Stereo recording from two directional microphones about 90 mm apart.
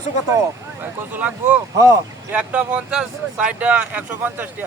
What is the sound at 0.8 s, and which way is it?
Speech, 20° right (ahead or behind).